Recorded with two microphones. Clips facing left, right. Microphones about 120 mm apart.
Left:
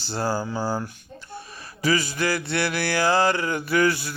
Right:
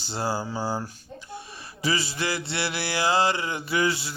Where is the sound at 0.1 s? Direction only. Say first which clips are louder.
Left 3 dB; 25° right (ahead or behind).